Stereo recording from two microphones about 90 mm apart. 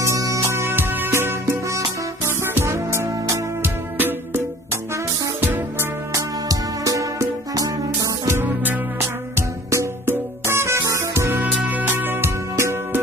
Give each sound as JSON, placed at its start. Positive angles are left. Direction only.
{"t": 0.0, "sound": "music", "side_deg": -35}
{"t": 3.9, "sound": "music", "side_deg": -20}
{"t": 5.4, "sound": "music", "side_deg": -20}
{"t": 6.1, "sound": "music", "side_deg": -40}
{"t": 8.4, "sound": "music", "side_deg": -25}